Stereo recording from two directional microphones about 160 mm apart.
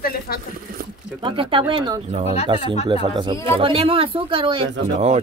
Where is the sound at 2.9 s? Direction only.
30° right (ahead or behind).